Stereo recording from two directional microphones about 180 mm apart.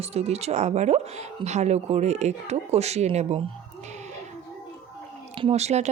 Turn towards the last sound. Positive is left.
turn(degrees=-40)  # may be behind; listen again after turning